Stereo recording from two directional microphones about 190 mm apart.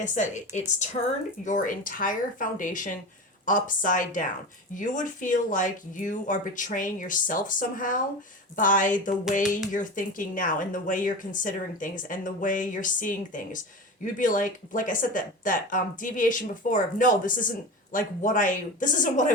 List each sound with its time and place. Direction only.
0.0 s speech: 40° left (ahead or behind)